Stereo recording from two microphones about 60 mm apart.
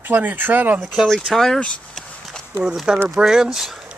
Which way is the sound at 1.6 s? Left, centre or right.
Centre.